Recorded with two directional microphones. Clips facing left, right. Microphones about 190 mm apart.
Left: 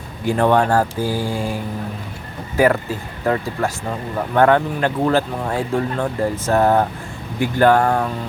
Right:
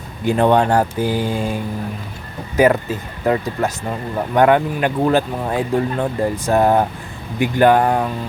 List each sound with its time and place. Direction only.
0.3 s speech: 20° right (ahead or behind)